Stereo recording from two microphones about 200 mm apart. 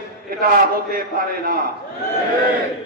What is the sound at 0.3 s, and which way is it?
A man's voice, 45° right (ahead or behind).